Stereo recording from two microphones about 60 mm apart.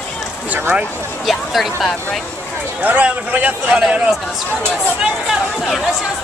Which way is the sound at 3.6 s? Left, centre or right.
Centre.